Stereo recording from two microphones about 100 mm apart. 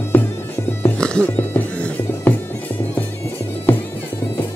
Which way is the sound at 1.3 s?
20° left (ahead or behind).